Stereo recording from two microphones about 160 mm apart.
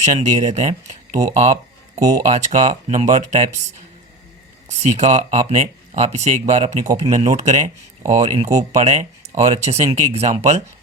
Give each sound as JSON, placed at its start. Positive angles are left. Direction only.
{"t": 0.0, "sound": "speech", "side_deg": -45}
{"t": 2.0, "sound": "speech", "side_deg": -20}
{"t": 2.2, "sound": "speech", "side_deg": -45}
{"t": 4.8, "sound": "speech", "side_deg": -45}